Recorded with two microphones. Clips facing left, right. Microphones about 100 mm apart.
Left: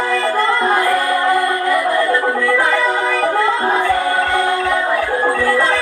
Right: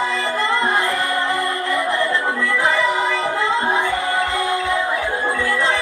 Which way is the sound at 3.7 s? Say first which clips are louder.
Left 4 dB; 20° right (ahead or behind).